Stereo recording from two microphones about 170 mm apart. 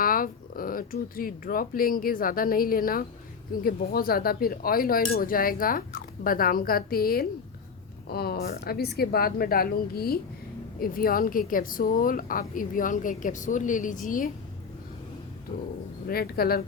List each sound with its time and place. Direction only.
0.0 s speech: 55° left (ahead or behind)
16.0 s speech: 65° left (ahead or behind)